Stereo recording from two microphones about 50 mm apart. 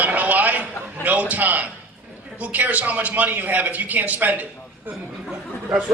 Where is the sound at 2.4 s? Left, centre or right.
Right.